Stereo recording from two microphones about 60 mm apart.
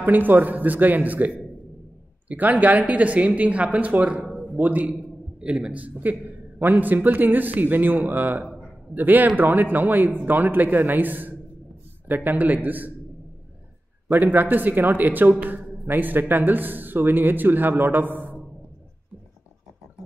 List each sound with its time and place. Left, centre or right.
0.0 s a man's voice: right
14.1 s speech: right
15.4 s a sound: right
15.9 s speech: right